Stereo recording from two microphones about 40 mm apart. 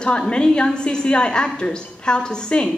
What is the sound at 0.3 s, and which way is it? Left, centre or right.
Music, left.